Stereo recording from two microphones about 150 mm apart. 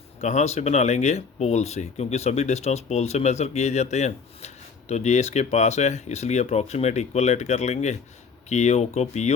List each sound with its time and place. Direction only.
0.2 s speech: 50° left (ahead or behind)